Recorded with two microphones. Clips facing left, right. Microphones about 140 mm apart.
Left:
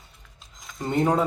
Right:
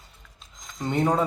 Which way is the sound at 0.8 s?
Centre (ahead or behind).